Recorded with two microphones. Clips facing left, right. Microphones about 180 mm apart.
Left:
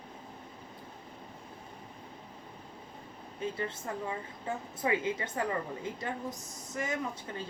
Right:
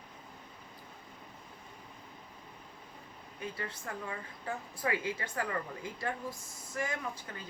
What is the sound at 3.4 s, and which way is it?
A woman's voice, 25° left (ahead or behind).